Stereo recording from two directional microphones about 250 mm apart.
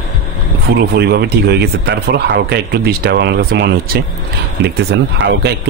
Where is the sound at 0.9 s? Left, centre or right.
Right.